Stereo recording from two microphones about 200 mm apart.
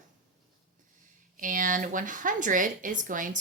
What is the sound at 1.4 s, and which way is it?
A woman's voice, 40° right (ahead or behind).